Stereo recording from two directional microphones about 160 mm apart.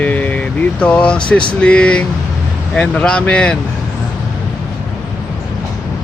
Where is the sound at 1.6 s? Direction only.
5° left (ahead or behind).